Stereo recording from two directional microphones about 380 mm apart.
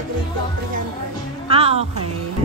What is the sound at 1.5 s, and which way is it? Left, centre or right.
Speech, centre.